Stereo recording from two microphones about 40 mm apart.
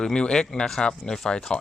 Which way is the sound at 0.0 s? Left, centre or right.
Centre.